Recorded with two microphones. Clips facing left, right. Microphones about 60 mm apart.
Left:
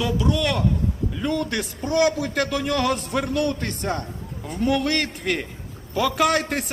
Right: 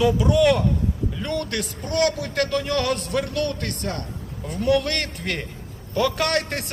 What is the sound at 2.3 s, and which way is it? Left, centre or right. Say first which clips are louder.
A man's voice: even; centre.